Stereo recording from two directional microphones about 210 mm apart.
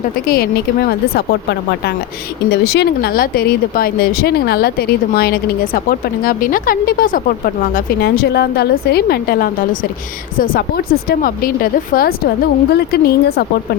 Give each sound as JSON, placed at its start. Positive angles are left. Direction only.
{"t": 0.3, "sound": "speech", "side_deg": 45}